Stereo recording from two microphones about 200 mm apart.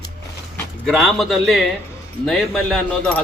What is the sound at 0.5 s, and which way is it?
A man's voice, centre (ahead or behind).